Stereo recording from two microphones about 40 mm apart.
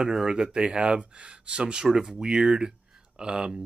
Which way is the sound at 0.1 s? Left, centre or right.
Centre.